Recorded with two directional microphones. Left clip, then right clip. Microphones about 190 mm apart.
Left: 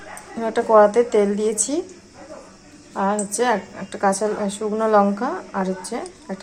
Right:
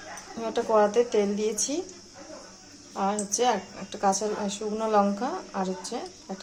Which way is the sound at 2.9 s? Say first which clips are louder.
Left 6 dB; 5° left (ahead or behind).